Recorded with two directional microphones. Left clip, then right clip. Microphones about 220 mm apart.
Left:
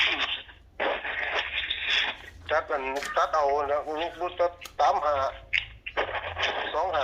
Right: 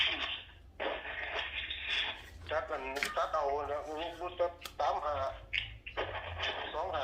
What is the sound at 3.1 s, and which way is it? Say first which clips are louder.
Speech: left 10 dB; 50° left (ahead or behind).